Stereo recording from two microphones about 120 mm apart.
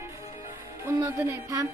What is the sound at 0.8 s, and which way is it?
Speech, 20° right (ahead or behind).